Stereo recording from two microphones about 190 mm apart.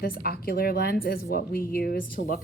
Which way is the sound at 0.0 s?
55° left (ahead or behind).